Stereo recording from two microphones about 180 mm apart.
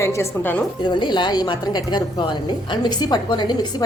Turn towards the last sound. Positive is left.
turn(degrees=25)  # may be behind; listen again after turning